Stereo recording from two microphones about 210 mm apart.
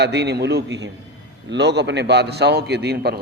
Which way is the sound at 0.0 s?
55° right (ahead or behind).